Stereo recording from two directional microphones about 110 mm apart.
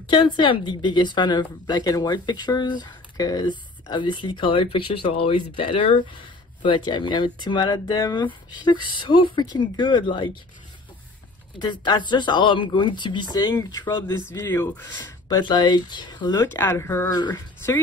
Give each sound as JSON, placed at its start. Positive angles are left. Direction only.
{"t": 0.0, "sound": "a woman's voice", "side_deg": 45}
{"t": 11.6, "sound": "a woman's voice", "side_deg": 45}
{"t": 14.3, "sound": "speech", "side_deg": 20}
{"t": 15.2, "sound": "a woman's voice", "side_deg": 40}
{"t": 16.3, "sound": "speech", "side_deg": 20}
{"t": 17.1, "sound": "speech", "side_deg": 40}